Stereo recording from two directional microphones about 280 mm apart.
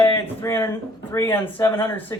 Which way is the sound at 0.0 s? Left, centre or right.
Centre.